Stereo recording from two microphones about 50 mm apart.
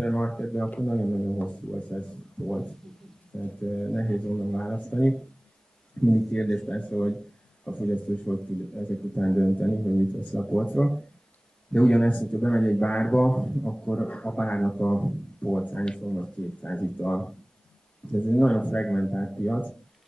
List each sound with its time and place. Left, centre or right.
0.0 s speech: centre
1.4 s a man's voice: left
11.7 s a man's voice: centre
18.3 s a man's voice: centre